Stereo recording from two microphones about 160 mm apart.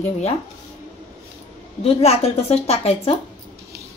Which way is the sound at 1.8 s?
40° left (ahead or behind).